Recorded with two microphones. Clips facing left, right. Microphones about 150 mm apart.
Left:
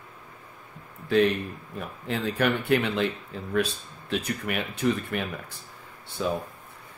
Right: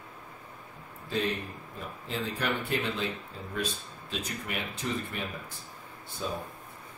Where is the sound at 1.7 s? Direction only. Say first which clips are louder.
Left 5 dB; 65° left (ahead or behind).